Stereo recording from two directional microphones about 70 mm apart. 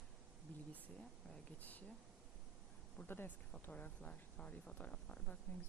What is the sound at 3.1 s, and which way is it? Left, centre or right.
Speech, left.